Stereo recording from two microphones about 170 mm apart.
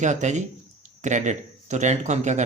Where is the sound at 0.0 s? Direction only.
45° right (ahead or behind).